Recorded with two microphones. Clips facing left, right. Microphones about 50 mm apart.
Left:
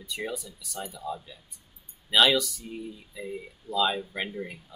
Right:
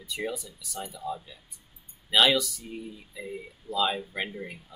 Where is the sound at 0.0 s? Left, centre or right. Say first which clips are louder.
Right 1 dB; centre.